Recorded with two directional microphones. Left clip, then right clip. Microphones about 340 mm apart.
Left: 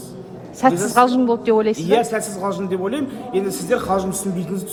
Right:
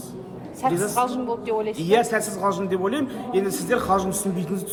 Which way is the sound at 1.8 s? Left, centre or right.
Centre.